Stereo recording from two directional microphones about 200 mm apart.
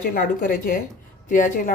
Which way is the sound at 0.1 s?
45° left (ahead or behind).